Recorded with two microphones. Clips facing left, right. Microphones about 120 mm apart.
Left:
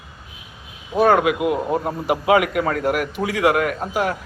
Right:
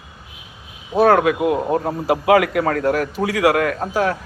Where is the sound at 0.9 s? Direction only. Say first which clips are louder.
Right 2 dB; 40° right (ahead or behind); by 1.7 s 25° right (ahead or behind).